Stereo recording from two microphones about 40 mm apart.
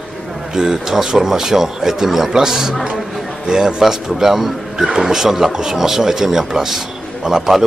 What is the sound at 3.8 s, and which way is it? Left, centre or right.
Speech, centre.